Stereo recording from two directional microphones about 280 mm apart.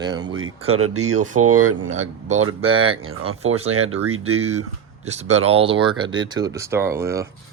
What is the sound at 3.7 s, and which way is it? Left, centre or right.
Speech, right.